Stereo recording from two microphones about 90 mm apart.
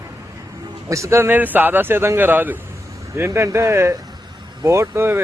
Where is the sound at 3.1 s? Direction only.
35° right (ahead or behind).